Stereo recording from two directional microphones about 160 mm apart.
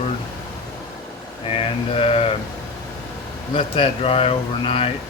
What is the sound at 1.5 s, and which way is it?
Speech, 35° left (ahead or behind).